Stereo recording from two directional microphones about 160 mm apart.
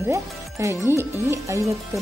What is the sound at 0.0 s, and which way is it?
A woman's voice, 20° right (ahead or behind).